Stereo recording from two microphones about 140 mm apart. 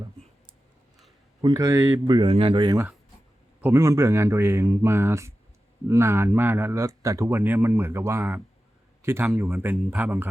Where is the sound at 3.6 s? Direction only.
20° right (ahead or behind).